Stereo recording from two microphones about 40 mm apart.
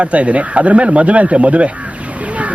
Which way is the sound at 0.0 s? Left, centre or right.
Right.